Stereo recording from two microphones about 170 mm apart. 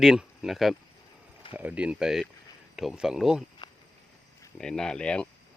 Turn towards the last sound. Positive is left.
turn(degrees=5)  # may be behind; listen again after turning